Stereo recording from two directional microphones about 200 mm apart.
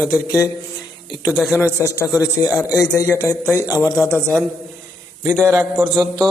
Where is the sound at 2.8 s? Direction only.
15° left (ahead or behind).